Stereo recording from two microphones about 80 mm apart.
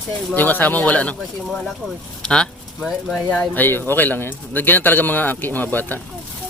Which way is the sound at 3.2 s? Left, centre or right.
Left.